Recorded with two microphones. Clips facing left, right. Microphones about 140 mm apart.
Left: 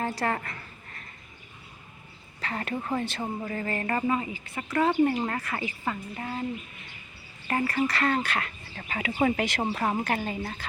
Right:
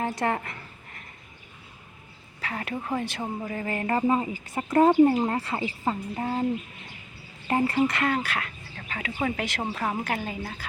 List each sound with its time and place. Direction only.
0.0 s speech: 20° right (ahead or behind)
2.4 s a woman's voice: 5° right (ahead or behind)
3.2 s a sound: 5° right (ahead or behind)
4.1 s speech: 40° right (ahead or behind)
5.4 s a woman's voice: 30° right (ahead or behind)
7.4 s speech: 20° right (ahead or behind)
8.1 s speech: 5° right (ahead or behind)
8.9 s speech: 10° left (ahead or behind)
9.7 s a woman's voice: 10° left (ahead or behind)
10.2 s speech: centre (ahead or behind)